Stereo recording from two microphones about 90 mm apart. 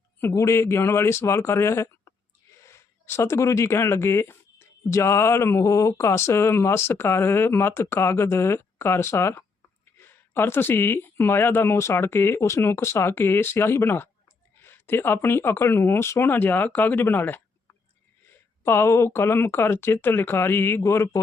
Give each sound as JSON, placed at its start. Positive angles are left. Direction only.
{"t": 0.2, "sound": "speech", "side_deg": 30}
{"t": 18.6, "sound": "speech", "side_deg": 25}